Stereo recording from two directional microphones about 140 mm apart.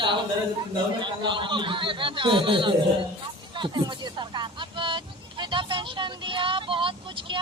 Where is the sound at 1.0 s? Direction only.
35° right (ahead or behind).